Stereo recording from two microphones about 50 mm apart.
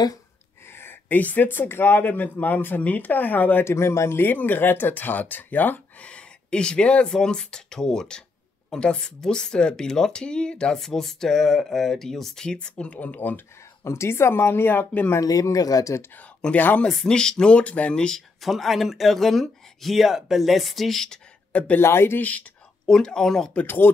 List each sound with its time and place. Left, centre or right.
0.7 s speech: left
3.6 s speech: left
4.2 s speech: left
6.0 s speech: left
12.4 s speech: centre; by 13.4 s left
13.8 s speech: left
15.1 s speech: left
16.5 s speech: left
16.8 s speech: centre
18.4 s speech: centre
21.5 s speech: left
21.8 s speech: left
22.8 s speech: centre